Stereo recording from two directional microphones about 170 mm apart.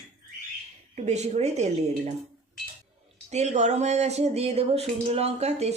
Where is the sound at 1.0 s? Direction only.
40° right (ahead or behind).